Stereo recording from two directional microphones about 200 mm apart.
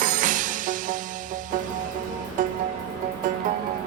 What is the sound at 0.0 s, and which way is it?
Music, 40° right (ahead or behind).